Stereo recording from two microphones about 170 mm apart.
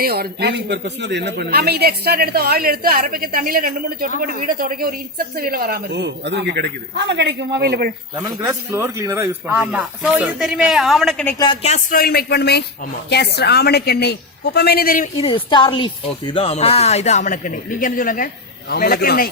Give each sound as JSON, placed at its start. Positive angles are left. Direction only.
{"t": 0.0, "sound": "speech", "side_deg": -65}
{"t": 8.1, "sound": "speech", "side_deg": -20}
{"t": 11.6, "sound": "speech", "side_deg": 40}
{"t": 11.9, "sound": "a woman's voice", "side_deg": 65}
{"t": 15.2, "sound": "a man's voice", "side_deg": 30}